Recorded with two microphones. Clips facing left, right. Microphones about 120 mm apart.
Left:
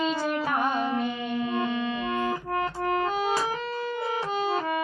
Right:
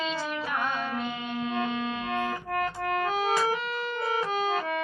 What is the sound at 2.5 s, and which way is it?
Music, 25° left (ahead or behind).